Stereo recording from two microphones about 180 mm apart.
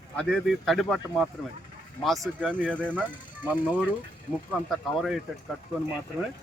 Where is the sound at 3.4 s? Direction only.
5° right (ahead or behind).